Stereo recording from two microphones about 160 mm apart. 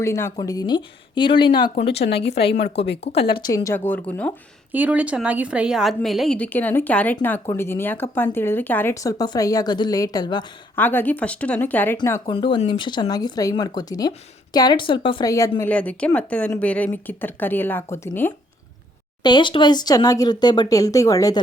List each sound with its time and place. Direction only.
0.0 s speech: 15° left (ahead or behind)
1.9 s a woman's voice: 90° left
3.0 s speech: 40° left (ahead or behind)
3.5 s a woman's voice: 20° left (ahead or behind)
4.7 s a woman's voice: 10° right (ahead or behind); by 10.4 s 25° left (ahead or behind)
10.8 s a woman's voice: 10° left (ahead or behind)
12.2 s a woman's voice: 30° left (ahead or behind); by 18.3 s 10° left (ahead or behind)
19.2 s speech: 30° left (ahead or behind)